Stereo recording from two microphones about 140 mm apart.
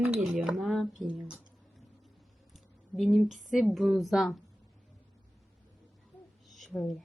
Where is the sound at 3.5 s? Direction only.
Centre (ahead or behind).